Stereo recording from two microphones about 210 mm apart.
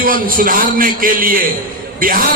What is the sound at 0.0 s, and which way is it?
A man's voice, 40° right (ahead or behind).